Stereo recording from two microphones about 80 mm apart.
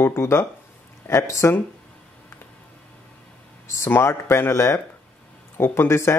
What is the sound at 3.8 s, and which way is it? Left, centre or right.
A man's voice, left.